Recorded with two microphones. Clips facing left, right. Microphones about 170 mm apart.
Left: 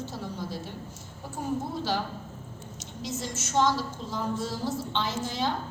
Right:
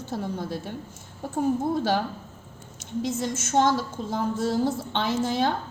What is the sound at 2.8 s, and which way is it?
A woman's voice, 55° right (ahead or behind).